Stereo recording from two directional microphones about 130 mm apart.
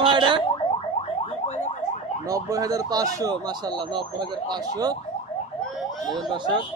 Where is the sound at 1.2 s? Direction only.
60° left (ahead or behind).